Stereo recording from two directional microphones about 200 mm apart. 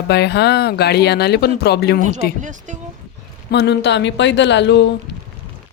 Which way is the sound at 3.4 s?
55° left (ahead or behind).